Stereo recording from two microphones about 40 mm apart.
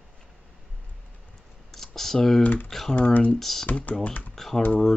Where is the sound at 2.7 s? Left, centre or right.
Centre.